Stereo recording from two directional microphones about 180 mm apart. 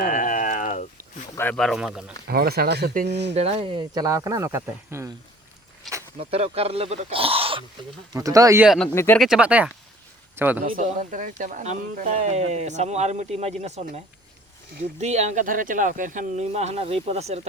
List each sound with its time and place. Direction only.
0.0 s a sound: 50° left (ahead or behind)
1.4 s speech: 5° left (ahead or behind)
2.2 s speech: 60° right (ahead or behind)
3.3 s speech: 35° right (ahead or behind); by 5.1 s 15° right (ahead or behind)
6.1 s speech: 35° right (ahead or behind)
8.1 s speech: 20° right (ahead or behind)
8.6 s a man's voice: centre (ahead or behind)
10.7 s speech: 45° right (ahead or behind)